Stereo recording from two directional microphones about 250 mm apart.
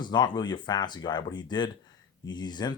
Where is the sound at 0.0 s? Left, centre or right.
Centre.